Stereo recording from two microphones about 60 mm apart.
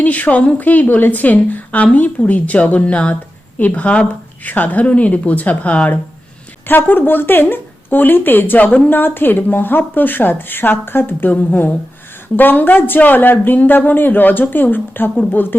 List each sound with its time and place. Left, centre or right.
0.0 s a woman's voice: left
6.7 s speech: left